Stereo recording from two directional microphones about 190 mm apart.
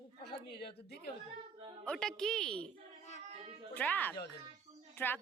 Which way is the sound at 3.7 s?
10° left (ahead or behind).